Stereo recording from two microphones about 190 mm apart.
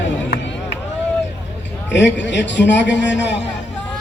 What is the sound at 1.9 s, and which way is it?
A man's voice, 70° left (ahead or behind).